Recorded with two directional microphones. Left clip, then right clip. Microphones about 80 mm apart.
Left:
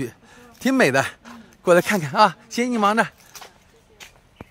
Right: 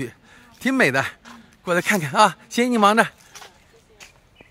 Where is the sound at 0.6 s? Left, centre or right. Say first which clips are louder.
Left 1 dB; centre.